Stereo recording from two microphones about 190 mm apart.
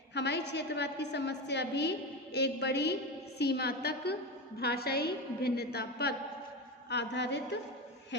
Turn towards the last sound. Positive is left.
turn(degrees=65)  # may be behind; listen again after turning